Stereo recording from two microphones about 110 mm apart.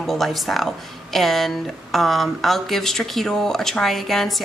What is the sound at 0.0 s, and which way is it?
Speech, centre (ahead or behind).